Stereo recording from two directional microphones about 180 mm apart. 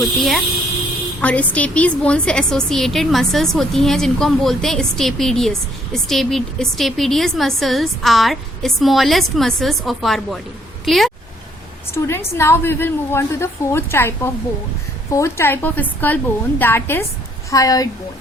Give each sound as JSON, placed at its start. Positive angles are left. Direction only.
{"t": 0.0, "sound": "a woman's voice", "side_deg": 0}
{"t": 11.9, "sound": "a woman's voice", "side_deg": 15}
{"t": 15.1, "sound": "a woman's voice", "side_deg": 15}